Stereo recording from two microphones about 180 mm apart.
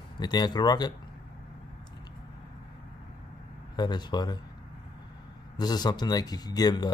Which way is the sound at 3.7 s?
25° left (ahead or behind).